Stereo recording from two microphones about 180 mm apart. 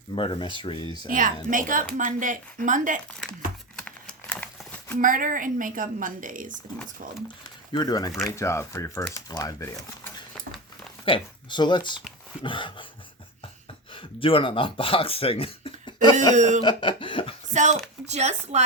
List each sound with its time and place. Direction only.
0.2 s speech: 25° left (ahead or behind)
1.5 s a woman's voice: 50° right (ahead or behind)
3.8 s computer keyboard: 5° left (ahead or behind)
4.9 s a woman's voice: 50° right (ahead or behind)
7.7 s speech: 20° left (ahead or behind)
13.9 s speech: 30° left (ahead or behind)
16.3 s a woman's voice: 40° right (ahead or behind)
16.6 s cough: 25° left (ahead or behind)
17.5 s speech: 40° right (ahead or behind)